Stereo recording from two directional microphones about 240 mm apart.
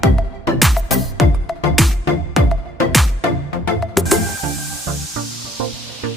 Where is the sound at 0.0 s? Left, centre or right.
Centre.